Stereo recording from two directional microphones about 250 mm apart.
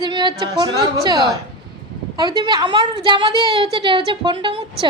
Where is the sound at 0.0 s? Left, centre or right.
Centre.